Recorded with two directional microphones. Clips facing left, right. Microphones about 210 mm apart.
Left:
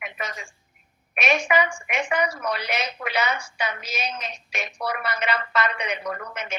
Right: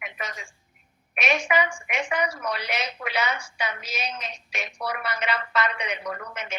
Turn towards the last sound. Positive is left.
turn(degrees=50)  # may be behind; listen again after turning